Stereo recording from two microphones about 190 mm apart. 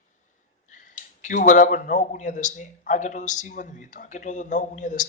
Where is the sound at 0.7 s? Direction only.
40° left (ahead or behind).